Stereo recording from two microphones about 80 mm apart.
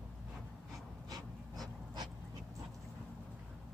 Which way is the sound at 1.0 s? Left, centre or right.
Right.